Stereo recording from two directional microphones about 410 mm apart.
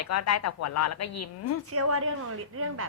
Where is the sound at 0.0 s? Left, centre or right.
Left.